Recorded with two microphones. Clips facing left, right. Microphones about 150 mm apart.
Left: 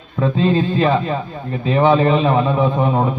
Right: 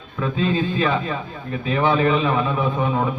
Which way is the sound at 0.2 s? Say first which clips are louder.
Left 5 dB; 35° left (ahead or behind).